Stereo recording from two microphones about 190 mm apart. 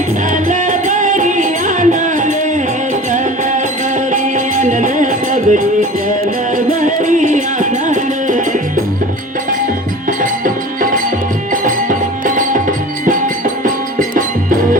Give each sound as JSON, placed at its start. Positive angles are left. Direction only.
{"t": 0.4, "sound": "music", "side_deg": -45}
{"t": 4.1, "sound": "music", "side_deg": -45}
{"t": 6.7, "sound": "music", "side_deg": -45}
{"t": 10.1, "sound": "music", "side_deg": -45}